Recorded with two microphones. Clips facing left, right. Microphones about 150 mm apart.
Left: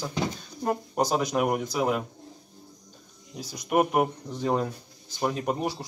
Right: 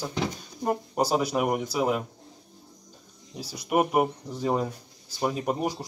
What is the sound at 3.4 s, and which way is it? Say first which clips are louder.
Speech: left 1 dB; 10° right (ahead or behind).